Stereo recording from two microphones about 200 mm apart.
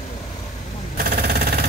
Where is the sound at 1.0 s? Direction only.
50° right (ahead or behind).